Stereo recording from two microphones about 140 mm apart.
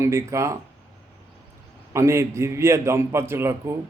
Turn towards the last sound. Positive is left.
turn(degrees=-20)  # may be behind; listen again after turning